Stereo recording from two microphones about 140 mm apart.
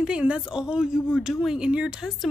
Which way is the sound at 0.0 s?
5° right (ahead or behind).